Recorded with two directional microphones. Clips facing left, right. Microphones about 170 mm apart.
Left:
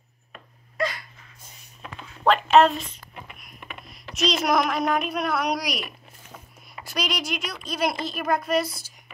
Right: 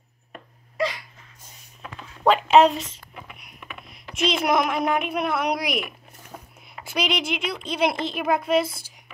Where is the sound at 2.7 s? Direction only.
90° right.